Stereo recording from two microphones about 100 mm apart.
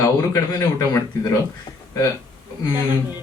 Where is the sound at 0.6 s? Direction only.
35° left (ahead or behind).